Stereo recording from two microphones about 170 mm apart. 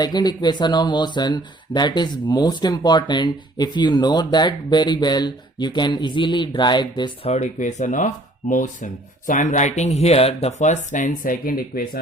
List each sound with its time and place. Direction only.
0.0 s speech: 25° left (ahead or behind)
7.3 s speech: 45° left (ahead or behind)